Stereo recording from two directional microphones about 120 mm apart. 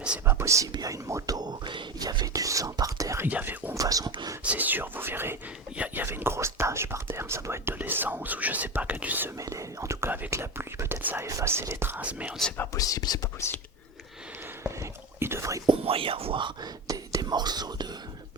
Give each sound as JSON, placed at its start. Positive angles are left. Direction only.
{"t": 0.3, "sound": "speech", "side_deg": -25}
{"t": 3.2, "sound": "speech", "side_deg": -15}
{"t": 3.8, "sound": "speech", "side_deg": -30}
{"t": 4.4, "sound": "speech", "side_deg": -15}
{"t": 9.4, "sound": "speech", "side_deg": -25}
{"t": 12.7, "sound": "speech", "side_deg": 30}
{"t": 14.6, "sound": "whispering", "side_deg": -20}
{"t": 15.8, "sound": "speech", "side_deg": -50}
{"t": 16.8, "sound": "speech", "side_deg": -30}